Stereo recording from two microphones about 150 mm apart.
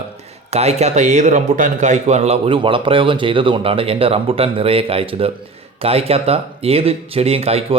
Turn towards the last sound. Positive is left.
turn(degrees=-40)  # may be behind; listen again after turning